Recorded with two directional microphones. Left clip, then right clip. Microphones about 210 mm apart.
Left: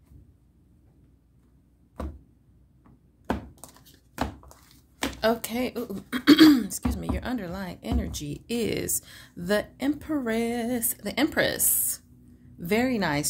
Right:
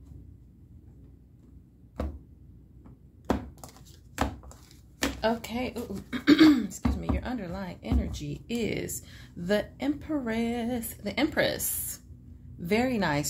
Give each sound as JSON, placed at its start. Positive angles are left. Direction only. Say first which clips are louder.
{"t": 5.2, "sound": "a woman's voice", "louder": "left 5 dB", "side_deg": 35}